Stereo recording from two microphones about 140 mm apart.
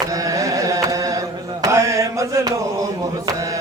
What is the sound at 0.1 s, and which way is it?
Carnatic music, 25° right (ahead or behind).